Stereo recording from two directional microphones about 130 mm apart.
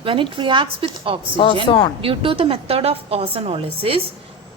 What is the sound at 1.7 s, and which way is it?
Speech, 40° left (ahead or behind).